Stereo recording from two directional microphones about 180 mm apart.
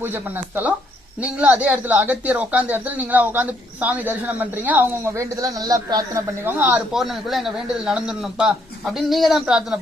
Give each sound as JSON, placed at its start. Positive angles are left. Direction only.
{"t": 0.0, "sound": "speech", "side_deg": -10}